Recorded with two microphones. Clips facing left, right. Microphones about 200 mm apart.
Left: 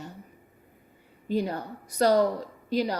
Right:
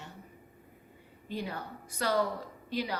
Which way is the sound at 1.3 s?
40° left (ahead or behind).